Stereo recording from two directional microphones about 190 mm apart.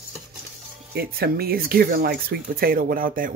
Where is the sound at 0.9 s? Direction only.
55° right (ahead or behind).